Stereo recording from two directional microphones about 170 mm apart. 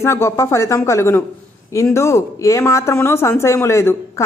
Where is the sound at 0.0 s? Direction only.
15° left (ahead or behind).